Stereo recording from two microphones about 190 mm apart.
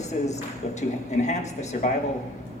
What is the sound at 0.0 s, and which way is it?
Speech, 35° left (ahead or behind).